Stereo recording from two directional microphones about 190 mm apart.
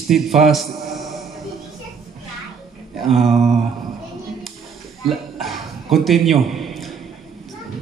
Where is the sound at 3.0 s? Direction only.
Centre (ahead or behind).